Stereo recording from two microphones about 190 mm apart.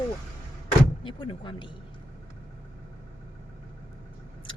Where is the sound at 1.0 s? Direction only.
25° left (ahead or behind).